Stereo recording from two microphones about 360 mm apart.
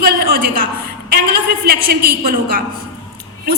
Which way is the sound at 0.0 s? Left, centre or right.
Right.